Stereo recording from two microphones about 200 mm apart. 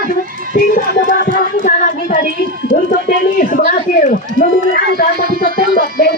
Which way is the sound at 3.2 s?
40° left (ahead or behind).